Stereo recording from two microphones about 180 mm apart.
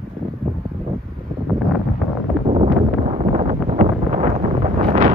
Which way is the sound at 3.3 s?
35° right (ahead or behind).